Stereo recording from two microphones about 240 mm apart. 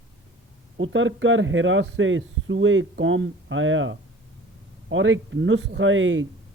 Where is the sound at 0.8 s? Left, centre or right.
Right.